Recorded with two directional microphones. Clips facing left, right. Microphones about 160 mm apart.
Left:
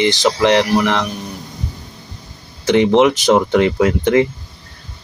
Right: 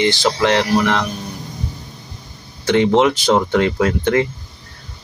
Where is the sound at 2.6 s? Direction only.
20° left (ahead or behind).